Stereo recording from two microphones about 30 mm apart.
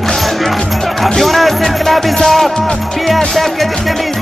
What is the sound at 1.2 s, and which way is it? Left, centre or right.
Music, centre.